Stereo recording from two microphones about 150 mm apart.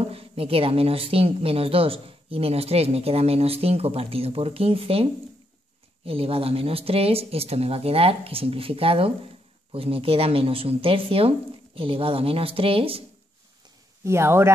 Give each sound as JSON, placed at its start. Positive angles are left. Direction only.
{"t": 0.1, "sound": "speech", "side_deg": -40}
{"t": 14.0, "sound": "speech", "side_deg": -15}